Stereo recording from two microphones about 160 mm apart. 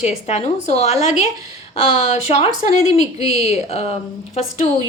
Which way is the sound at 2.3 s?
40° left (ahead or behind).